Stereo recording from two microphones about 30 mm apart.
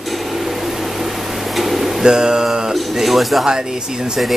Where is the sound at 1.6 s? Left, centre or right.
Centre.